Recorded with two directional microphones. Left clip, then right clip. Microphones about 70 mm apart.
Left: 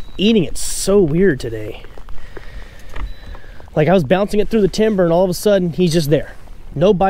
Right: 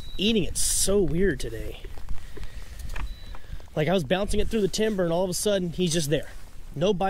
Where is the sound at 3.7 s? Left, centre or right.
Left.